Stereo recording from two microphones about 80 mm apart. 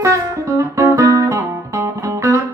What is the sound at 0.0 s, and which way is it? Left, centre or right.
Music, right.